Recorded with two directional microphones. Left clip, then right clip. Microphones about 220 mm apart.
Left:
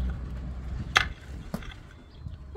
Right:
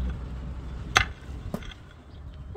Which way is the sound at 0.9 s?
20° right (ahead or behind).